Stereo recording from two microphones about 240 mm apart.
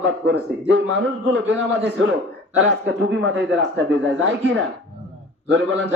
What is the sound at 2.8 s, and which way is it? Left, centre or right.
A man's voice, right.